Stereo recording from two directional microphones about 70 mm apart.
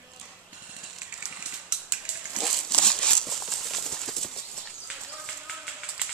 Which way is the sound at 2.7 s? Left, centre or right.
Centre.